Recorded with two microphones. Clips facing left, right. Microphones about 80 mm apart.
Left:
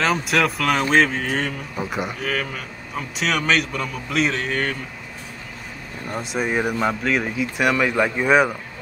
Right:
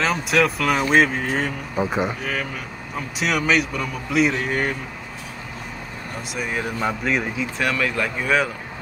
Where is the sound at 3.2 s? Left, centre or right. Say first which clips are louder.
Right 1 dB; centre.